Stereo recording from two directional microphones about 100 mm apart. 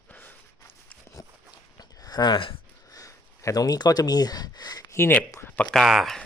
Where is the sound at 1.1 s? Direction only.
40° left (ahead or behind); by 2.6 s 55° left (ahead or behind).